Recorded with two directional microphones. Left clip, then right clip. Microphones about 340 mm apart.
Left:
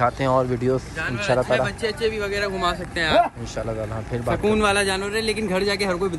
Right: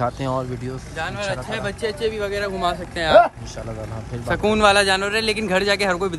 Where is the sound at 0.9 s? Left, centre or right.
Right.